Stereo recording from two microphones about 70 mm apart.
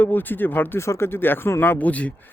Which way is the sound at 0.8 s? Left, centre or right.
Left.